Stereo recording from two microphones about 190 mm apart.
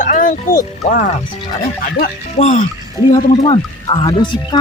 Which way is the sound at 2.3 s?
35° left (ahead or behind).